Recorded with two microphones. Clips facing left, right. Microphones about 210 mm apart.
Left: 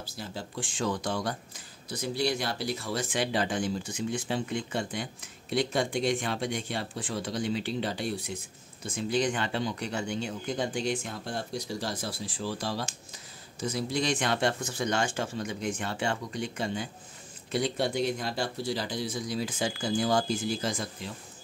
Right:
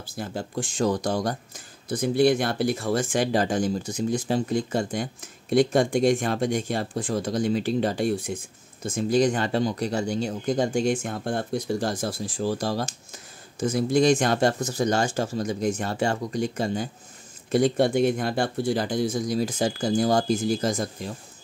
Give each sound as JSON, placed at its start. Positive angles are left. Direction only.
{"t": 0.0, "sound": "speech", "side_deg": -50}